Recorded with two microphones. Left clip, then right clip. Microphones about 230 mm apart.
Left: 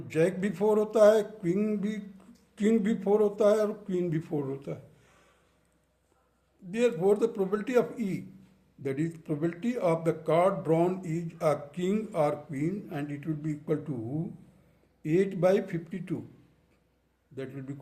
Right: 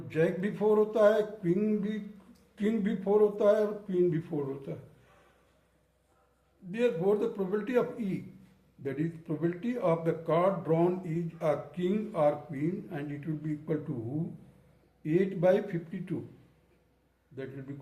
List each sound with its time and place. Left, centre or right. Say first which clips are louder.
0.1 s speech: left 2 dB; left
6.7 s speech: left 2 dB; left
15.0 s speech: left 1 dB; left